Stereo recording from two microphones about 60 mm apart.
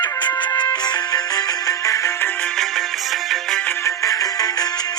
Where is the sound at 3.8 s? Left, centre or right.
Left.